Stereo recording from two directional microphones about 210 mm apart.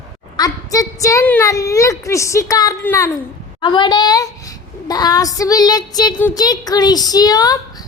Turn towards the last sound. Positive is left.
turn(degrees=20)  # may be behind; listen again after turning